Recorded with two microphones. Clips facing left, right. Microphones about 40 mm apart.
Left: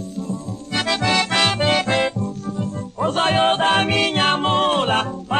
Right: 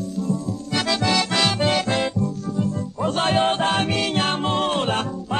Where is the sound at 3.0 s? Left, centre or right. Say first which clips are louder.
Left 3 dB; left.